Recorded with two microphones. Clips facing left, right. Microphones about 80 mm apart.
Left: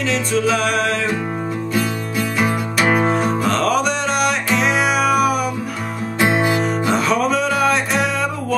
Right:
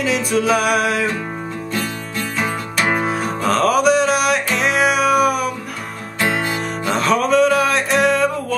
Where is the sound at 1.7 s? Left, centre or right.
Centre.